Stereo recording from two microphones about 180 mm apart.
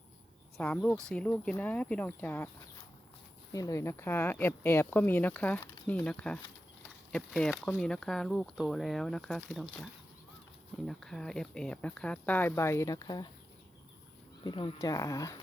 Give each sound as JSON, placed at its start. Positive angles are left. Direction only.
{"t": 0.5, "sound": "speech", "side_deg": 5}
{"t": 3.5, "sound": "speech", "side_deg": 20}
{"t": 14.4, "sound": "speech", "side_deg": 25}